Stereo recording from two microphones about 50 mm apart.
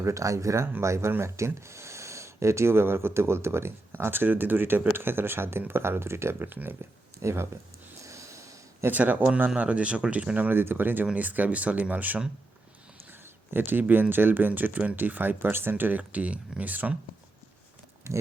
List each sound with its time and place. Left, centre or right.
0.0 s speech: right
0.8 s speech: right
6.5 s speech: right
7.2 s speech: right
8.0 s snort: right
8.9 s speech: right
10.5 s speech: right
11.0 s speech: right
18.1 s speech: right